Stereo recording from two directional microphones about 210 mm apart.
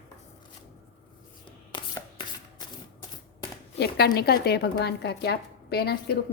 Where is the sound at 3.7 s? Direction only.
50° left (ahead or behind).